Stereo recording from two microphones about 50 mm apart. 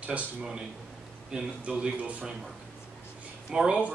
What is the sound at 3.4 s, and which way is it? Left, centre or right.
Speech, centre.